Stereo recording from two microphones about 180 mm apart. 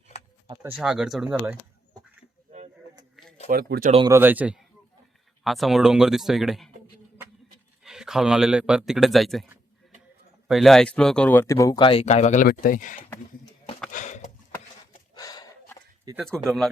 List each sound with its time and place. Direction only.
0.8 s speech: 5° right (ahead or behind)
3.2 s a sound: centre (ahead or behind)
3.5 s speech: 55° right (ahead or behind)
4.1 s a man's voice: 10° right (ahead or behind)
7.9 s a man's voice: 5° right (ahead or behind)
10.5 s speech: centre (ahead or behind); by 13.0 s 45° left (ahead or behind)
13.9 s a sound: 45° left (ahead or behind)
15.1 s horse: 20° left (ahead or behind)
16.1 s speech: 20° right (ahead or behind)